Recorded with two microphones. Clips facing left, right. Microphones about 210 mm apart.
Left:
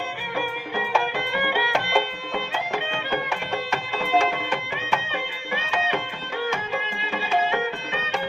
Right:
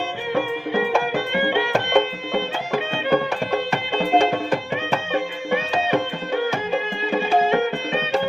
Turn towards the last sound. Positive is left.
turn(degrees=-35)  # may be behind; listen again after turning